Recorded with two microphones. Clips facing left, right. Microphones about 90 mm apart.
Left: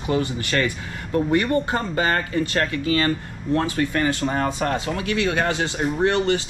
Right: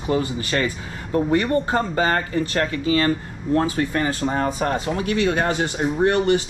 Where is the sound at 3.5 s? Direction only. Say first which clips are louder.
Right 1 dB; 35° right (ahead or behind).